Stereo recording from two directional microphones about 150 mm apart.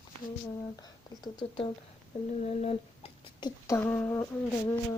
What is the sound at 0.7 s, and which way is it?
Speech, 25° left (ahead or behind).